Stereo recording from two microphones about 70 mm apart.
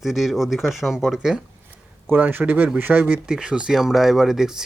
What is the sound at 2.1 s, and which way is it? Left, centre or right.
Speech, right.